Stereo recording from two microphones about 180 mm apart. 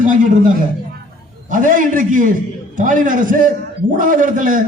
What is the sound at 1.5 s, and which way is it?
A man's voice, 45° right (ahead or behind).